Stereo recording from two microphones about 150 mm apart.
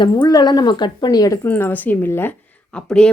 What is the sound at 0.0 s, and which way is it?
A woman's voice, 25° left (ahead or behind).